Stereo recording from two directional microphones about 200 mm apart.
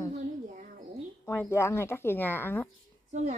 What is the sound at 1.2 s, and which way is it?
Speech, 10° left (ahead or behind).